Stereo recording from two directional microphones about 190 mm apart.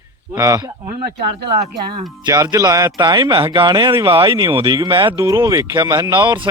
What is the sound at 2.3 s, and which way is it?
Speech, 15° right (ahead or behind).